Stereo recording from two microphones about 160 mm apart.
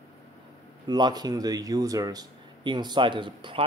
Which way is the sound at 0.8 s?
25° right (ahead or behind).